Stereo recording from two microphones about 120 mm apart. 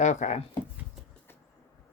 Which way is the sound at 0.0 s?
80° left.